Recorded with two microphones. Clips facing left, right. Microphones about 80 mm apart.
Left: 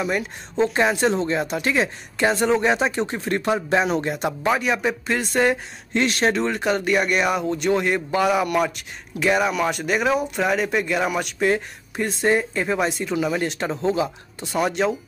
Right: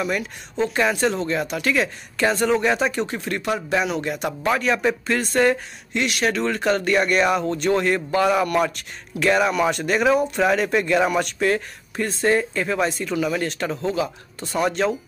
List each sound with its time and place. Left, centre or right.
0.0 s speech: left
4.5 s speech: centre
5.9 s speech: left; by 15.0 s centre